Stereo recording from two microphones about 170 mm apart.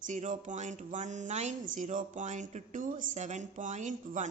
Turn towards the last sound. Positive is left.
turn(degrees=-45)  # may be behind; listen again after turning